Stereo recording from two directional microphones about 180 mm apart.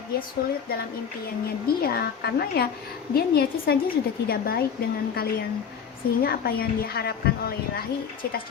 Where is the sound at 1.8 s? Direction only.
60° left (ahead or behind).